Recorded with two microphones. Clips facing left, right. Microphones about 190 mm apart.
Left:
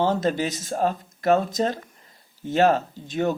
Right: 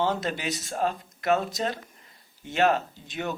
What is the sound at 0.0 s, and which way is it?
Speech, 45° left (ahead or behind).